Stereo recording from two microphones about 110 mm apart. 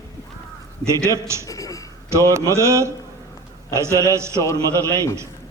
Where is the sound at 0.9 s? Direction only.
25° right (ahead or behind).